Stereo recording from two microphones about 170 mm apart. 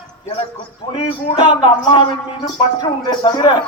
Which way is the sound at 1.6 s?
30° left (ahead or behind).